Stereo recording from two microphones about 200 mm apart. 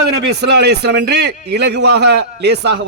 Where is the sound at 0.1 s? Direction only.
55° right (ahead or behind).